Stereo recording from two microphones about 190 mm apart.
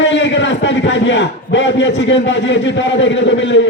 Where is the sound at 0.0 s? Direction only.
70° left (ahead or behind).